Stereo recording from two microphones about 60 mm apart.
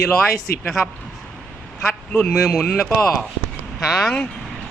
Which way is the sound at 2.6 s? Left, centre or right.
Left.